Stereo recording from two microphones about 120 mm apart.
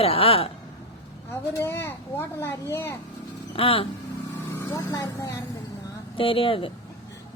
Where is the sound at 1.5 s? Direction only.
20° left (ahead or behind).